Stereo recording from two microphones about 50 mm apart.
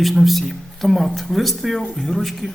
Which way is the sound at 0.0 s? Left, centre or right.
Centre.